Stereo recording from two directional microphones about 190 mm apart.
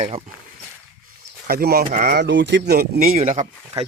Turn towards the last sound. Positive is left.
turn(degrees=-35)  # may be behind; listen again after turning